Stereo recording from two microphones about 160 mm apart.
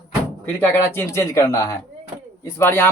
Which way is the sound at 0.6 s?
15° left (ahead or behind).